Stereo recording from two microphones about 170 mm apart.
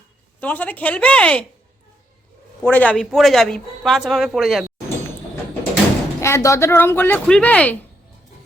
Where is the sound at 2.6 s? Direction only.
10° left (ahead or behind).